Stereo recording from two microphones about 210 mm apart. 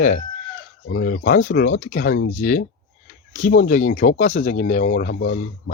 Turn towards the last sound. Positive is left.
turn(degrees=45)  # may be behind; listen again after turning